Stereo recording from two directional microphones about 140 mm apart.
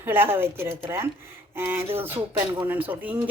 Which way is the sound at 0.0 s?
15° right (ahead or behind).